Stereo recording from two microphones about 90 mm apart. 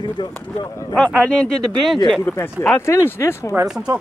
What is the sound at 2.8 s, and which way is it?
Speech, 30° left (ahead or behind).